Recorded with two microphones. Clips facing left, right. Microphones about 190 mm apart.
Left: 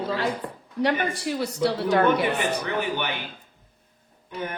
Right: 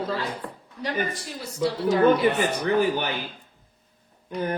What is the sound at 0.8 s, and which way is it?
Speech, 70° left (ahead or behind).